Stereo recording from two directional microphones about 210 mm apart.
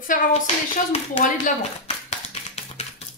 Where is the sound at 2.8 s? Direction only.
30° left (ahead or behind).